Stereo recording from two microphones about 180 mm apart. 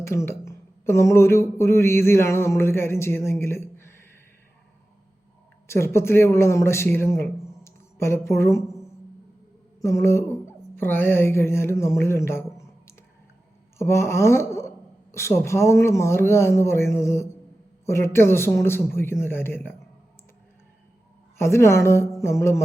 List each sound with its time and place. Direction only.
0.0 s speech: 15° left (ahead or behind)
5.6 s speech: 15° left (ahead or behind)
9.8 s speech: 15° left (ahead or behind)
13.7 s speech: 15° left (ahead or behind)
21.3 s speech: 15° left (ahead or behind)